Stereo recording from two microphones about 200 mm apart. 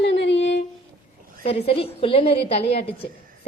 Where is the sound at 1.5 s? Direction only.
30° left (ahead or behind).